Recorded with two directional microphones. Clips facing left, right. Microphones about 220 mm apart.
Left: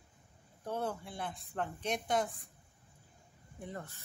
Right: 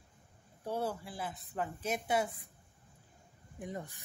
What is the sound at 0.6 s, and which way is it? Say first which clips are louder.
Speech: right 1 dB; 10° right (ahead or behind).